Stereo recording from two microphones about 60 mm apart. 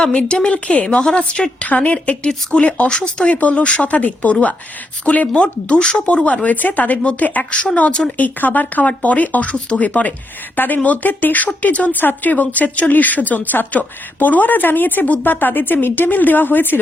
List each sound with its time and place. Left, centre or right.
0.0 s a woman's voice: centre
8.2 s a woman's voice: left